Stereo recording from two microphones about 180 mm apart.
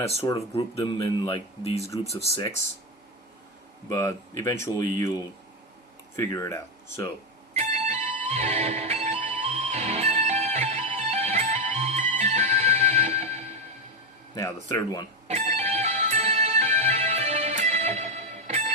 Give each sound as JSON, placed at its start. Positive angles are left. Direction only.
{"t": 0.2, "sound": "speech", "side_deg": 15}
{"t": 1.2, "sound": "speech", "side_deg": 35}
{"t": 3.8, "sound": "speech", "side_deg": 15}
{"t": 7.5, "sound": "music", "side_deg": -40}
{"t": 14.3, "sound": "speech", "side_deg": 15}
{"t": 15.3, "sound": "music", "side_deg": -40}